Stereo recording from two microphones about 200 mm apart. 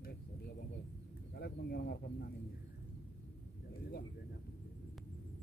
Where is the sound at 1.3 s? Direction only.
55° left (ahead or behind).